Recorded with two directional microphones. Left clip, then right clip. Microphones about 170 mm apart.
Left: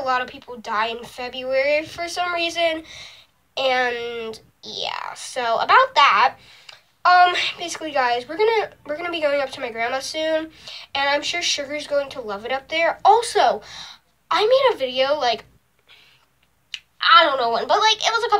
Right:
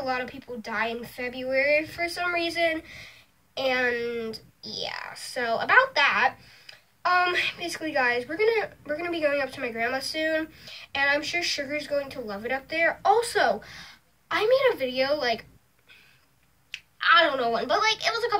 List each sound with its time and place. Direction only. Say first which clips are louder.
0.1 s speech: left 7 dB; 15° right (ahead or behind)
16.7 s a woman's voice: left 6 dB; 20° right (ahead or behind)